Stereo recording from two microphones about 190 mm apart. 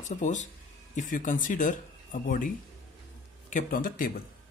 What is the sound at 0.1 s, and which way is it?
Speech, 40° left (ahead or behind).